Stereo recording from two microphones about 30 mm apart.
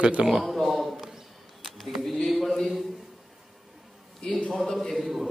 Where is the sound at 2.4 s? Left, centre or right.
Centre.